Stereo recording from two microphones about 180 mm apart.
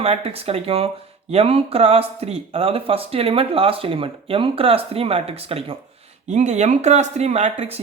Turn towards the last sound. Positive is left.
turn(degrees=-35)  # may be behind; listen again after turning